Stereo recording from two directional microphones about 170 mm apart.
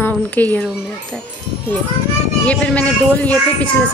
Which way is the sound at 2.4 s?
5° left (ahead or behind).